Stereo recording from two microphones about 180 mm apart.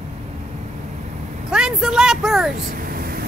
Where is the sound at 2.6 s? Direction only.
50° right (ahead or behind).